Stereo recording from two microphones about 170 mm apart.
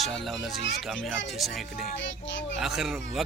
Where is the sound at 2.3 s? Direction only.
90° left.